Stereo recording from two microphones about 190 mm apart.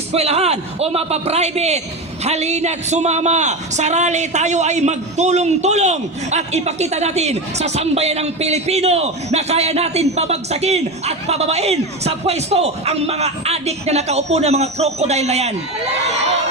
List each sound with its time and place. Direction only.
0.1 s a man's voice: 35° right (ahead or behind)